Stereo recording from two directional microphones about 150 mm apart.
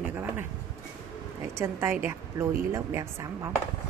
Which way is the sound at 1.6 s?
15° right (ahead or behind).